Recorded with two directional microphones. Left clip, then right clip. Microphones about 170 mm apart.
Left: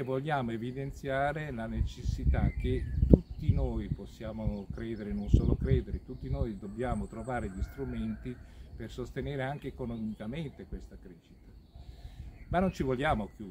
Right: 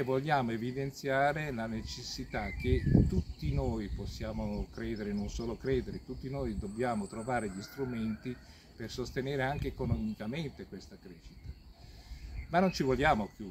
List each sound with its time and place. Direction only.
0.0 s speech: 5° left (ahead or behind)
12.4 s speech: 5° left (ahead or behind)